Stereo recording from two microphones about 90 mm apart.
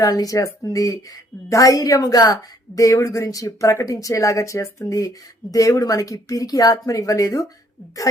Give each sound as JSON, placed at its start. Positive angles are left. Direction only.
{"t": 0.0, "sound": "a woman's voice", "side_deg": 45}